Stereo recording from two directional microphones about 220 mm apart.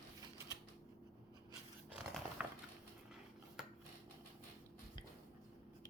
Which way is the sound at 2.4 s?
5° right (ahead or behind).